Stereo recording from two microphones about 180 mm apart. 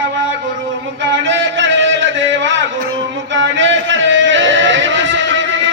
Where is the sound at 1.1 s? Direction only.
90° right.